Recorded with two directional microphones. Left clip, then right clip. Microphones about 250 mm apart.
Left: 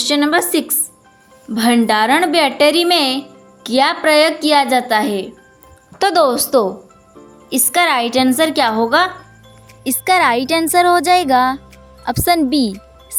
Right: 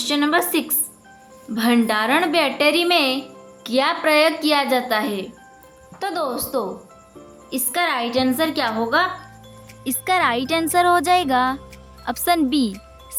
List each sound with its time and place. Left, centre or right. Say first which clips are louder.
0.0 s a woman's voice: left 4 dB; centre
6.0 s a woman's voice: left 11 dB; left; by 12.7 s centre